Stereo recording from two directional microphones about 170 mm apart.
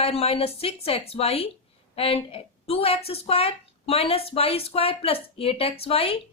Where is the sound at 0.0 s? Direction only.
35° left (ahead or behind).